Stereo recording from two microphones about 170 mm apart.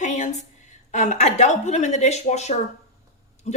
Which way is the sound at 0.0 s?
45° left (ahead or behind).